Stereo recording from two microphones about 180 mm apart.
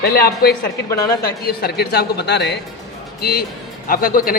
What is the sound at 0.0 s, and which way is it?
A man's voice, 60° left (ahead or behind).